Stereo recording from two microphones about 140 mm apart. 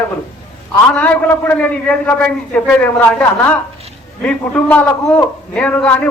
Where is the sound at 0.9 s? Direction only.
10° left (ahead or behind).